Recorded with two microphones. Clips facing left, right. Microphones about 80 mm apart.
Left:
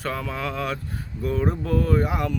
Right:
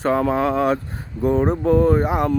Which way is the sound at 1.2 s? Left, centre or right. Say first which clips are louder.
Right 7 dB; right.